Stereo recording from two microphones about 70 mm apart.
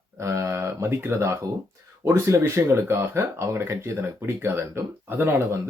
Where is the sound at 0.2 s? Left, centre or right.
Right.